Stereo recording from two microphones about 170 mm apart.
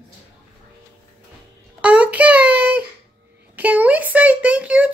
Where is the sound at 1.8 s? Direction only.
10° right (ahead or behind).